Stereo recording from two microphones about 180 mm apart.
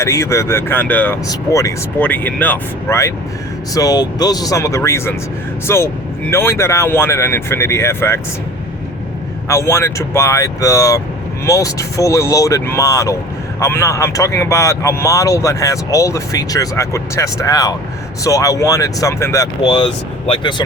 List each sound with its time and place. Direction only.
0.0 s speech: 15° left (ahead or behind)
9.5 s speech: 15° left (ahead or behind)